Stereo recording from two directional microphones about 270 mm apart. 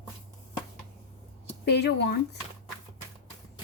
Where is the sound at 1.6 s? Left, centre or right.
Left.